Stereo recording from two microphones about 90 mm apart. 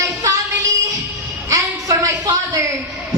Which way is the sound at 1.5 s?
40° right (ahead or behind).